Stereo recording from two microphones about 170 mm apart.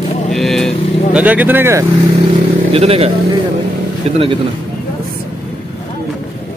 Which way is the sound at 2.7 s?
35° right (ahead or behind).